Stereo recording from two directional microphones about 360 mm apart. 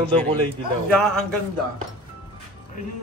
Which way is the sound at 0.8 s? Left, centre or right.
Centre.